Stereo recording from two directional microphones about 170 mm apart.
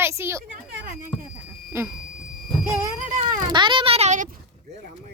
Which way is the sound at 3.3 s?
25° right (ahead or behind).